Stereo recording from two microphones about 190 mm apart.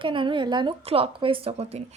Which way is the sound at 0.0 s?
25° right (ahead or behind).